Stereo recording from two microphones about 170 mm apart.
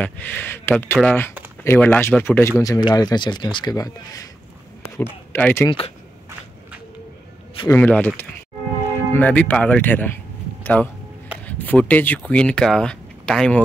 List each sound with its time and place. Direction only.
0.0 s speech: 10° left (ahead or behind)
2.6 s speech: 20° left (ahead or behind)
5.7 s speech: 35° left (ahead or behind)
7.6 s speech: 10° left (ahead or behind)
9.1 s speech: 10° left (ahead or behind)
10.6 s music: 10° left (ahead or behind)
11.4 s speech: 10° left (ahead or behind)